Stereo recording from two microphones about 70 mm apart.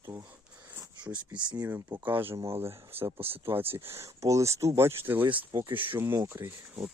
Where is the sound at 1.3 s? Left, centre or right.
Right.